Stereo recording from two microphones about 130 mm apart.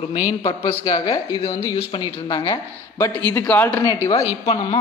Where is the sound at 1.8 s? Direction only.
40° left (ahead or behind).